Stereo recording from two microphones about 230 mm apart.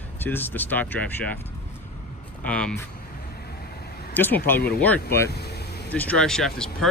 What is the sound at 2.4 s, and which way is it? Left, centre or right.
Speech, centre.